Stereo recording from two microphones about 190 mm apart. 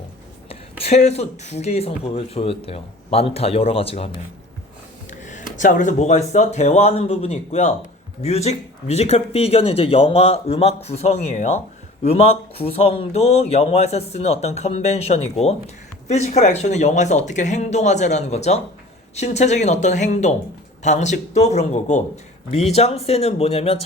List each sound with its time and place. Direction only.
0.4 s speech: 35° left (ahead or behind)
5.2 s speech: 40° left (ahead or behind)